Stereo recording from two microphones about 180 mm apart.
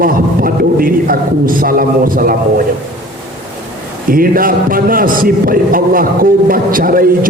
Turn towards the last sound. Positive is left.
turn(degrees=-50)  # may be behind; listen again after turning